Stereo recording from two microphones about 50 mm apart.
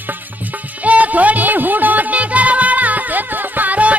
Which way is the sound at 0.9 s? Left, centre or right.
Right.